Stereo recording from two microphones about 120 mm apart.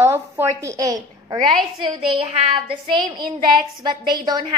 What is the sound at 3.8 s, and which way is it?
Speech, 35° right (ahead or behind).